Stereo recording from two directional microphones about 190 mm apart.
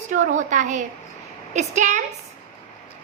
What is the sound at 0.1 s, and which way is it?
A woman's voice, 40° right (ahead or behind).